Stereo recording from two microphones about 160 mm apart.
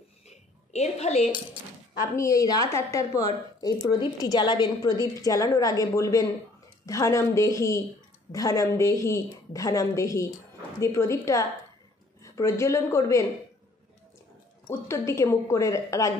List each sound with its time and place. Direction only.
0.3 s a sound: 45° left (ahead or behind)
2.0 s a woman's voice: 20° left (ahead or behind)
14.7 s a woman's voice: 20° left (ahead or behind)